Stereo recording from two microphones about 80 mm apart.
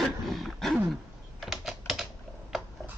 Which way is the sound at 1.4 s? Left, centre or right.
Centre.